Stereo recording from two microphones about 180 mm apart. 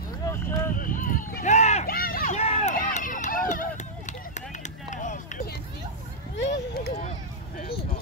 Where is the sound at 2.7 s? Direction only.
50° left (ahead or behind).